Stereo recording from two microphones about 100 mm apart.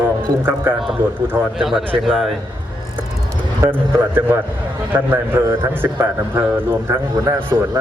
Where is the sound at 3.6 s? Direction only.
20° right (ahead or behind).